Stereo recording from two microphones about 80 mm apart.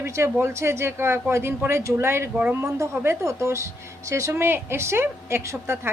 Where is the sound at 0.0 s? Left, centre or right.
Right.